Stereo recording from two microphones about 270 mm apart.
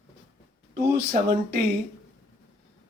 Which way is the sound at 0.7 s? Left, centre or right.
Right.